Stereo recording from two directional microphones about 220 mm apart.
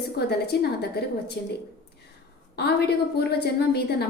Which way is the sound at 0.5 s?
50° left (ahead or behind).